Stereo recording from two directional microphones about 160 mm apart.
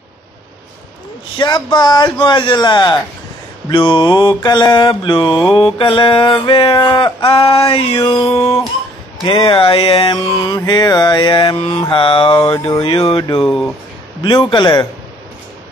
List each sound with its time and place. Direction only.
1.4 s mantra: 25° left (ahead or behind)
10.4 s mantra: 25° left (ahead or behind)
13.5 s speech: 5° left (ahead or behind)
14.5 s mantra: 30° left (ahead or behind)